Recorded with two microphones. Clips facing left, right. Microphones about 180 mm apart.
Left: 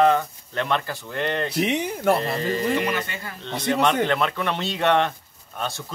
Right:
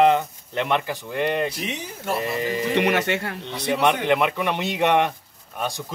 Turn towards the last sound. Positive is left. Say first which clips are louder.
# right 2 dB
turn(degrees=-15)  # may be behind; listen again after turning